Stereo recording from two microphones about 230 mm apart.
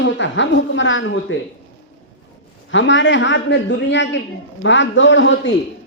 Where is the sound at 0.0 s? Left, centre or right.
Left.